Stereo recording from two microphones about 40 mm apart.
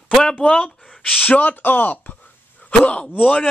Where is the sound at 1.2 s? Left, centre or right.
Left.